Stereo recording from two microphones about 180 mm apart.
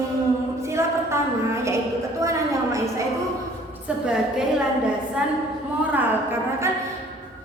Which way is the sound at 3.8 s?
5° right (ahead or behind).